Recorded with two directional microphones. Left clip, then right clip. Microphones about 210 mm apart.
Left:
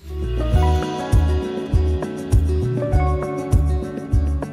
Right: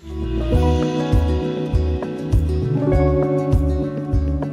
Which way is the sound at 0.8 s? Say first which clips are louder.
Right 3 dB; centre (ahead or behind).